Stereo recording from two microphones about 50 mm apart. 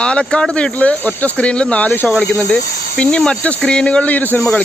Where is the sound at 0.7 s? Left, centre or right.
Left.